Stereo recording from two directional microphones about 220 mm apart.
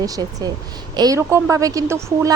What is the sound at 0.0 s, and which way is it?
A woman's voice, 15° right (ahead or behind).